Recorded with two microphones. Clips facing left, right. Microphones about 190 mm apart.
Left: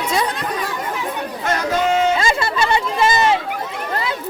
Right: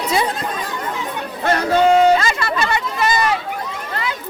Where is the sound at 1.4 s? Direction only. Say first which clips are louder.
Right 5 dB; 35° right (ahead or behind).